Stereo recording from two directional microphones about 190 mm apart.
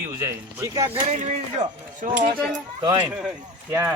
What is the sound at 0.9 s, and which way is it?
Speech, 35° right (ahead or behind).